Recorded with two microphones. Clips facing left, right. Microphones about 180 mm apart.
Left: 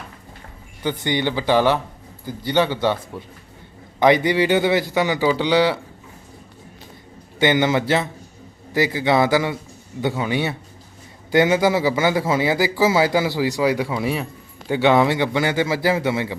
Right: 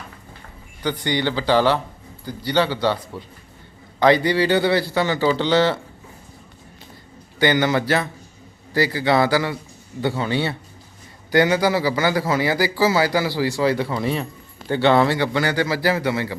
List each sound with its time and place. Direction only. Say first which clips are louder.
0.8 s a man's voice: even; 20° left (ahead or behind)
7.3 s a man's voice: left 1 dB; 20° left (ahead or behind)